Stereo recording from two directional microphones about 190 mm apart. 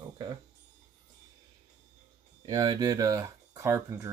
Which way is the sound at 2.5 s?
20° right (ahead or behind).